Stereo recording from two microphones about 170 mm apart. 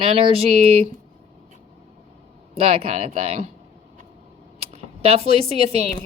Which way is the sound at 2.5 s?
35° right (ahead or behind).